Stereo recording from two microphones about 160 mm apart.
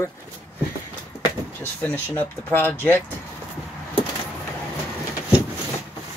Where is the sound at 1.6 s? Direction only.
10° left (ahead or behind).